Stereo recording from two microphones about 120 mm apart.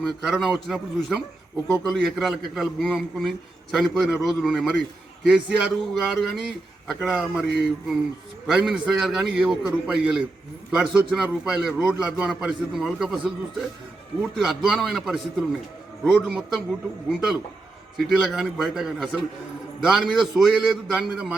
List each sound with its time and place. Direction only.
0.0 s a man's voice: centre (ahead or behind)
8.4 s a man's voice: 5° right (ahead or behind)